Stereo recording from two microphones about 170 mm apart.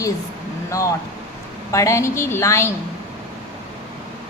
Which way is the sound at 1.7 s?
15° left (ahead or behind).